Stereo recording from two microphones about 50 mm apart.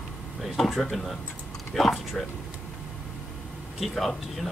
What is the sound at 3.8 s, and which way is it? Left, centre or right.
Speech, centre.